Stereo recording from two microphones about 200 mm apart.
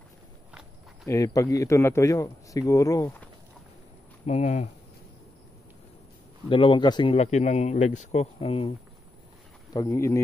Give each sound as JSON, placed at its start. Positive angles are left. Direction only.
{"t": 1.0, "sound": "speech", "side_deg": 15}
{"t": 4.3, "sound": "a man's voice", "side_deg": 35}
{"t": 6.5, "sound": "a man's voice", "side_deg": 25}
{"t": 9.7, "sound": "speech", "side_deg": 15}